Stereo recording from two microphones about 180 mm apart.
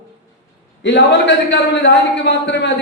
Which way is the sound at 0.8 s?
80° left.